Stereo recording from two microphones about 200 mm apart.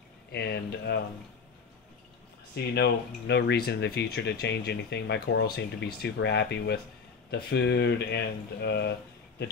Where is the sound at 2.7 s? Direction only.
60° left (ahead or behind).